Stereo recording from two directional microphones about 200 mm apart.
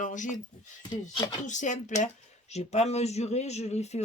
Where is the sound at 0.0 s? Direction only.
40° left (ahead or behind).